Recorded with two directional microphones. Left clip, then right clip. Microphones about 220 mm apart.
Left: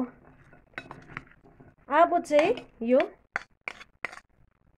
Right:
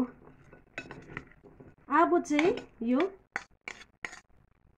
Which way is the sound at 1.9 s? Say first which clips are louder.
Left 4 dB; 45° left (ahead or behind).